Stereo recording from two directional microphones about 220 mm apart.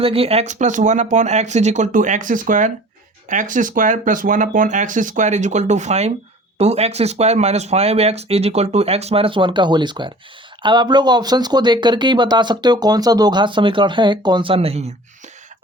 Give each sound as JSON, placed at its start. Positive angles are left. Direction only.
{"t": 0.0, "sound": "speech", "side_deg": -25}